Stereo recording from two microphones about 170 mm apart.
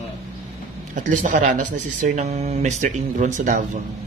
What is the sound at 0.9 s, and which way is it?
Speech, 50° right (ahead or behind).